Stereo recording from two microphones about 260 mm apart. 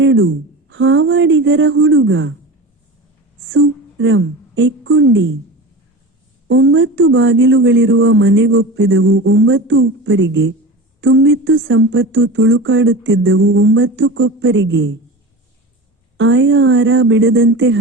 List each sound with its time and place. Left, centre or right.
0.0 s speech: right
3.4 s a woman's voice: right
6.5 s speech: right
16.1 s speech: right